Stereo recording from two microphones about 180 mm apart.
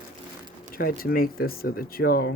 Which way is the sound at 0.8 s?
55° left (ahead or behind).